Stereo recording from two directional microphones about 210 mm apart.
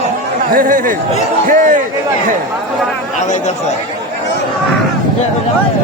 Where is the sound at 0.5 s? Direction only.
40° right (ahead or behind).